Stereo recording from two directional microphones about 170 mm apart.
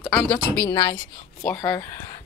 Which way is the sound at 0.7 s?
25° left (ahead or behind).